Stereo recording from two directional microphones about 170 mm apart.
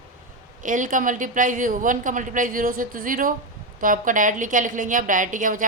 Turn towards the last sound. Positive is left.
turn(degrees=-50)  # may be behind; listen again after turning